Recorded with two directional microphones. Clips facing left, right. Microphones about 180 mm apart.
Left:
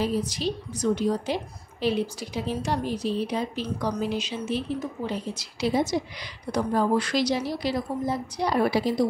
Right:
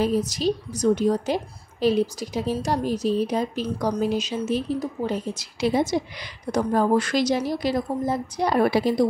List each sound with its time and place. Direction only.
0.0 s a woman's voice: 45° right (ahead or behind)